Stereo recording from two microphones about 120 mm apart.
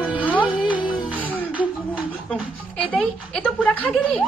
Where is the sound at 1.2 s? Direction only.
15° left (ahead or behind).